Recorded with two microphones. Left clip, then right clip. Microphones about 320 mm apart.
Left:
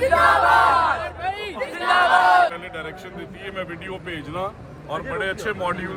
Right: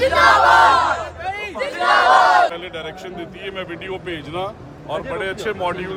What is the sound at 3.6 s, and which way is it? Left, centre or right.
Speech, right.